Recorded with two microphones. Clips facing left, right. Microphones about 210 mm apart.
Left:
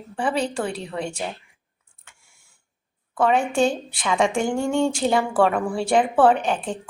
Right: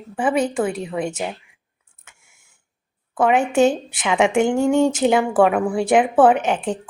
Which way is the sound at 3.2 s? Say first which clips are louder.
Right 4 dB; 20° right (ahead or behind).